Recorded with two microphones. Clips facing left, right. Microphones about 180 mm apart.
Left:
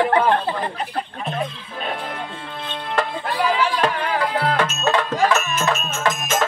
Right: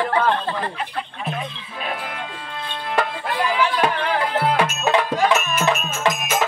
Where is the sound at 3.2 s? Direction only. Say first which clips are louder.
Left 1 dB; centre (ahead or behind).